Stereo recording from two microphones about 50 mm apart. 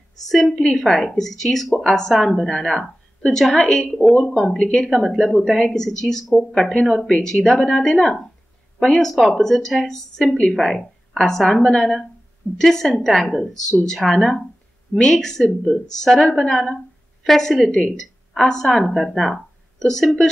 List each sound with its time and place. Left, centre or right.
0.3 s a woman's voice: centre
4.6 s speech: centre
4.9 s a woman's voice: centre
18.3 s speech: centre